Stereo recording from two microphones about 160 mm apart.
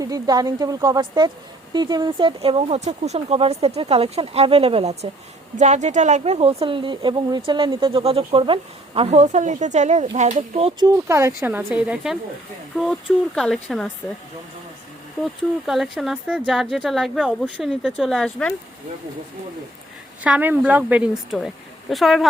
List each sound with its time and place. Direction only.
0.0 s speech: 25° right (ahead or behind); by 13.9 s 5° left (ahead or behind)
15.2 s speech: centre (ahead or behind)
20.2 s speech: 10° right (ahead or behind)